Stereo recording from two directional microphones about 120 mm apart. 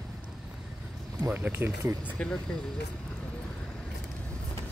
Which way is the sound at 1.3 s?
15° right (ahead or behind).